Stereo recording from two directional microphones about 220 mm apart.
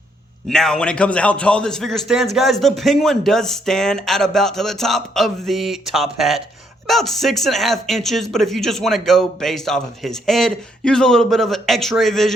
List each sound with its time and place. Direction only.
0.4 s a man's voice: centre (ahead or behind)